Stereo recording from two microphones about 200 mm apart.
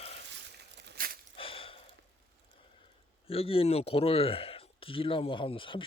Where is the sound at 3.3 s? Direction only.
30° left (ahead or behind).